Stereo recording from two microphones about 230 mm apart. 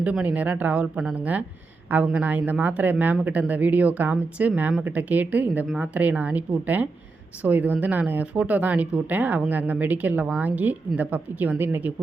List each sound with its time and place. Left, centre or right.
0.0 s speech: centre